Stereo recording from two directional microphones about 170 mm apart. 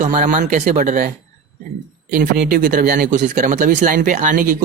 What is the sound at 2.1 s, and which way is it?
Speech, 50° right (ahead or behind).